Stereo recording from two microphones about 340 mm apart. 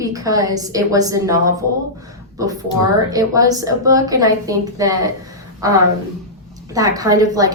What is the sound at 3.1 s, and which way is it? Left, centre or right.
A woman's voice, centre.